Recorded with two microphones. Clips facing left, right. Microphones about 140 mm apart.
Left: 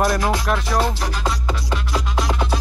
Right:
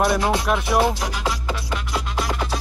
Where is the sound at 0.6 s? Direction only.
15° right (ahead or behind).